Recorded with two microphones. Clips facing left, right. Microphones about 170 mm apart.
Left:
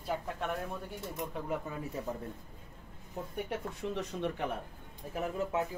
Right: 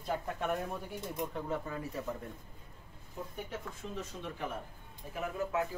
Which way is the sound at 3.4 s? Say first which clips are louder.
Left 6 dB; 65° left (ahead or behind).